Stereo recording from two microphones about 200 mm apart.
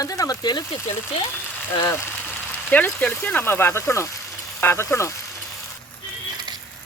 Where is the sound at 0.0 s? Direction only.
15° left (ahead or behind).